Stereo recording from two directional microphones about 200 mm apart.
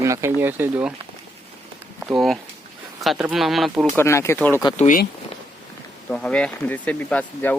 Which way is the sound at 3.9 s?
15° left (ahead or behind).